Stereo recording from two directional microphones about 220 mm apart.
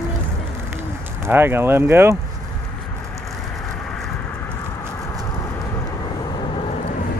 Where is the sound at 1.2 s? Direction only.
10° right (ahead or behind).